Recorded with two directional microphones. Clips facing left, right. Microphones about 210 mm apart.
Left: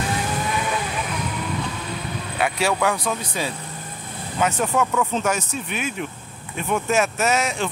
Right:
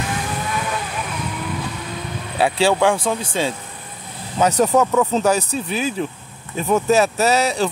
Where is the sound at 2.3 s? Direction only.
30° right (ahead or behind).